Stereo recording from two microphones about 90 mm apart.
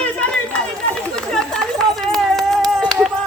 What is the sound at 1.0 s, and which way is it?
Run, 10° left (ahead or behind).